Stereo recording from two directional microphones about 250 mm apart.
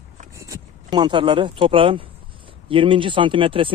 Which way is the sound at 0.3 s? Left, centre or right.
Centre.